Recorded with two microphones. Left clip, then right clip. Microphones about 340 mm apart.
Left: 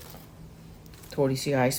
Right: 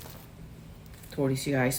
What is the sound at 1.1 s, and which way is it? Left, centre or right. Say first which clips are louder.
Speech: left 3 dB; left.